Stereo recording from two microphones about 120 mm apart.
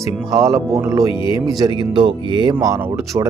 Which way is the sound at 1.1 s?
45° left (ahead or behind).